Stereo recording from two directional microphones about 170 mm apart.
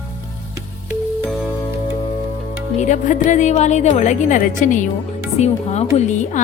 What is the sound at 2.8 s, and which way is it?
A woman's voice, 45° left (ahead or behind).